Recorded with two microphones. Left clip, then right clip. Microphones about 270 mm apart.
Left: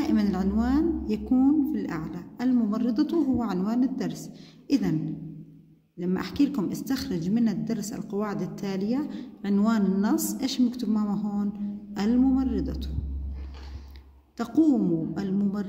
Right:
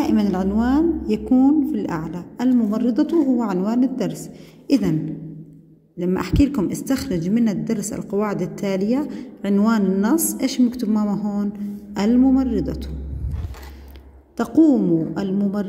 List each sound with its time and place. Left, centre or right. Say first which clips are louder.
0.0 s a woman's voice: right 6 dB; centre
5.9 s a woman's voice: right 7 dB; centre
14.3 s a woman's voice: right 7 dB; centre